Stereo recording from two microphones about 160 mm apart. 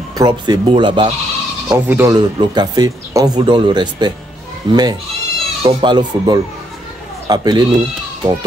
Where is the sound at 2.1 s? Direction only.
25° right (ahead or behind).